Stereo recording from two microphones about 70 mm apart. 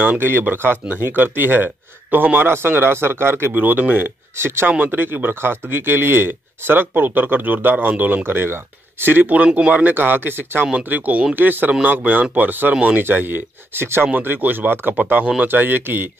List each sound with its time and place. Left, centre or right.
0.0 s speech: right
9.9 s speech: right